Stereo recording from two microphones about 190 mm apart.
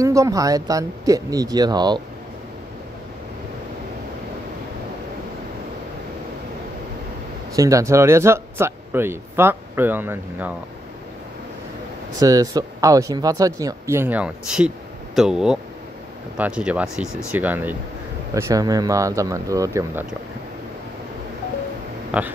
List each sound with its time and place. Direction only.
0.0 s speech: 15° right (ahead or behind)
7.5 s speech: 15° right (ahead or behind)
12.2 s speech: 20° right (ahead or behind)
22.1 s speech: 5° right (ahead or behind)